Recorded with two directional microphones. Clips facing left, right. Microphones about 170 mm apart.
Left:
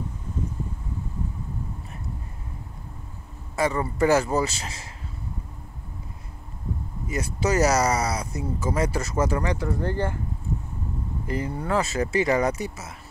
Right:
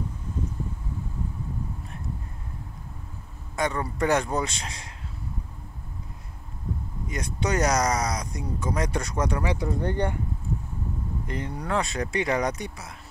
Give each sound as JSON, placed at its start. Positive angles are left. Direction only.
{"t": 3.5, "sound": "speech", "side_deg": 5}
{"t": 7.1, "sound": "speech", "side_deg": 5}
{"t": 9.4, "sound": "speech", "side_deg": -10}
{"t": 11.2, "sound": "speech", "side_deg": 5}